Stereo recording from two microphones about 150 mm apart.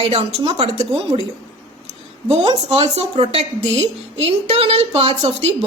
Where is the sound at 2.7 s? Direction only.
45° right (ahead or behind).